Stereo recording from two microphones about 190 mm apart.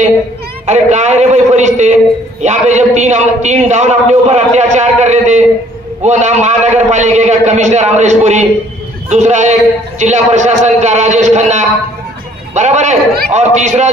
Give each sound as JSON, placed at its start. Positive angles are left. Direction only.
{"t": 0.7, "sound": "a man's voice", "side_deg": -35}